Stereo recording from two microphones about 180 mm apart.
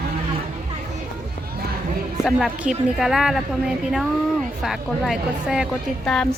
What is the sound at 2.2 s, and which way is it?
A woman's voice, centre (ahead or behind).